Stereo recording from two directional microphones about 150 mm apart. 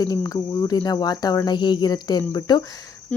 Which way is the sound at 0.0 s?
25° left (ahead or behind).